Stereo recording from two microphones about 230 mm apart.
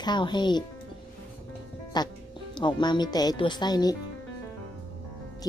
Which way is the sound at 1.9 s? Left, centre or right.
Centre.